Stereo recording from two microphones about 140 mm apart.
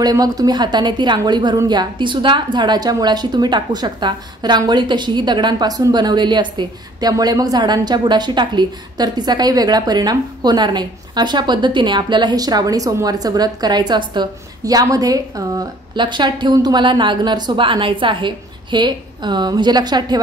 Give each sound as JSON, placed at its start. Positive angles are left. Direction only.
{"t": 0.0, "sound": "a woman's voice", "side_deg": -25}